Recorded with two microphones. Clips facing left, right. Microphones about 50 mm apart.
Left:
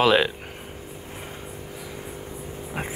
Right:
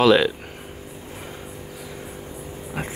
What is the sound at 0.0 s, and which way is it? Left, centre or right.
Speech, centre.